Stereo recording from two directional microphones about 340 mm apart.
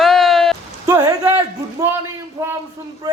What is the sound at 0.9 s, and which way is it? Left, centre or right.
Speech, centre.